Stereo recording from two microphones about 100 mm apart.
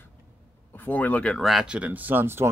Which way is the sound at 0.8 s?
15° left (ahead or behind).